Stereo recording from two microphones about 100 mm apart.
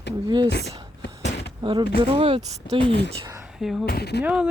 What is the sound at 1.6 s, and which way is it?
Speech, 60° right (ahead or behind).